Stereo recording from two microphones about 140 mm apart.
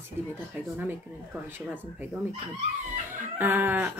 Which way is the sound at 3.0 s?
15° right (ahead or behind).